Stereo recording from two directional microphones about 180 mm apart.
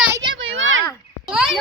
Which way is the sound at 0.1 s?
25° right (ahead or behind).